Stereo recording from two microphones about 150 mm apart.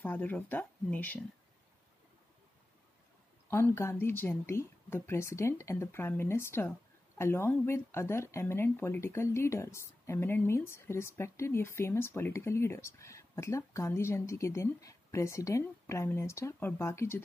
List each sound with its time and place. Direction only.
0.0 s speech: 10° left (ahead or behind)
3.4 s speech: 15° left (ahead or behind)